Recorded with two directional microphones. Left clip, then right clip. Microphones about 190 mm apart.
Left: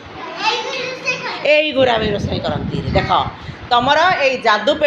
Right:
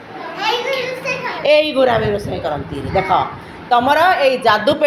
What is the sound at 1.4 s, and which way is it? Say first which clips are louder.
A woman's voice: right 1 dB; centre (ahead or behind).